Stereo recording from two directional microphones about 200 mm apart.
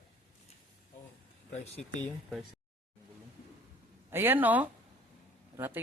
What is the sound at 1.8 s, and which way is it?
Speech, 5° left (ahead or behind).